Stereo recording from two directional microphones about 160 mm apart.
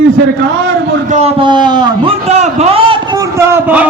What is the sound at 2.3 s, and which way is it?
Speech, 40° right (ahead or behind).